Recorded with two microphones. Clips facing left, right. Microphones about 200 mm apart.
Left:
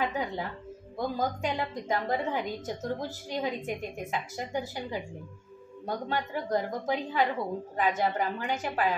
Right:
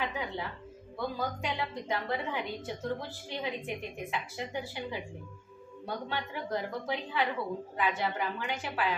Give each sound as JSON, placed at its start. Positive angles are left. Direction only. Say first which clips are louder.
{"t": 0.0, "sound": "music", "louder": "left 4 dB", "side_deg": 40}
{"t": 0.9, "sound": "a woman's voice", "louder": "left 4 dB", "side_deg": 45}